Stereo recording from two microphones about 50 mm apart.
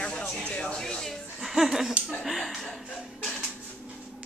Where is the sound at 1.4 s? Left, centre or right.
Centre.